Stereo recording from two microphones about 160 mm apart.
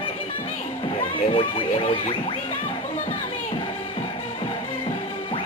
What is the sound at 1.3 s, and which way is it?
Music, 45° left (ahead or behind).